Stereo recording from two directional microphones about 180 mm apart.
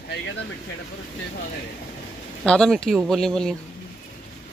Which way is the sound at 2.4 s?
5° left (ahead or behind).